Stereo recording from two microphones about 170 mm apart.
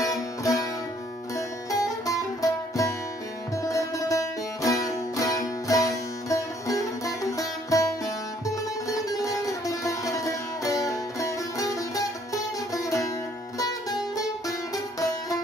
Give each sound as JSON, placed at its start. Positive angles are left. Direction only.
{"t": 0.0, "sound": "music", "side_deg": 20}